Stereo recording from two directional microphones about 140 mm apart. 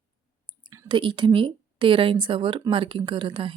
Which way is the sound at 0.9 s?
35° right (ahead or behind).